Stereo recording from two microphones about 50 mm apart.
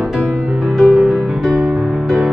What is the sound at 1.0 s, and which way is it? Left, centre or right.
Music, centre.